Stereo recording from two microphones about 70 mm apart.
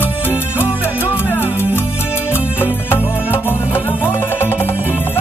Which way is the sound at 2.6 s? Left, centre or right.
Left.